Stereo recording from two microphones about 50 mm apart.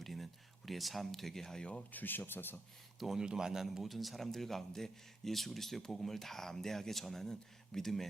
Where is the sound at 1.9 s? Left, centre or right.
Left.